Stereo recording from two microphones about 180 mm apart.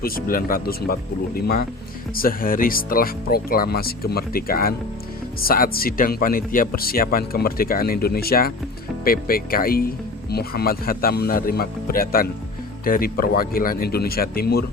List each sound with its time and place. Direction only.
0.0 s speech: 55° left (ahead or behind)